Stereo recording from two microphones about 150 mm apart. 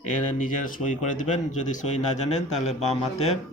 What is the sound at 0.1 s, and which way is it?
Speech, 60° left (ahead or behind).